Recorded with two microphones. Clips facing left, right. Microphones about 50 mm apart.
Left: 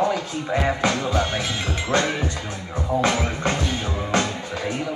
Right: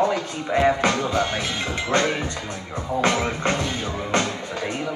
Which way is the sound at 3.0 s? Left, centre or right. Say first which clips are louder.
Right 1 dB; right.